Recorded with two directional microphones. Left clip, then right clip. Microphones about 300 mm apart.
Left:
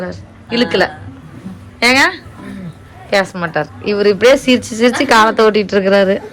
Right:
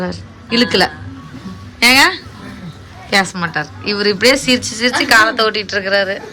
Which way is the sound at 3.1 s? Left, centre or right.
Centre.